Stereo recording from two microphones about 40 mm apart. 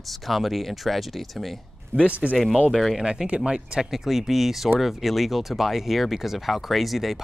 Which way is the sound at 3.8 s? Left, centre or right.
Centre.